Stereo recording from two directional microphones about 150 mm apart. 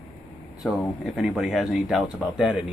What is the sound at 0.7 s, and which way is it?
Speech, centre (ahead or behind).